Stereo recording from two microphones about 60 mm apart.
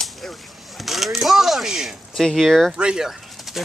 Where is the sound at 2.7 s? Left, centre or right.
Centre.